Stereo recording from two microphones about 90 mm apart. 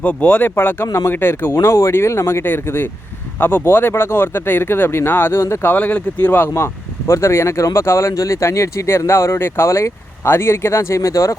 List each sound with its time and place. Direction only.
0.0 s speech: 15° left (ahead or behind)
5.7 s speech: 20° left (ahead or behind); by 11.3 s 35° left (ahead or behind)